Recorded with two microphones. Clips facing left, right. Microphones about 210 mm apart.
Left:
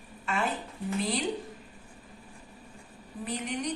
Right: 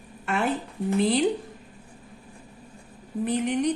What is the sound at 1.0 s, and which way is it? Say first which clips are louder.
Speech: right 9 dB; 60° right (ahead or behind).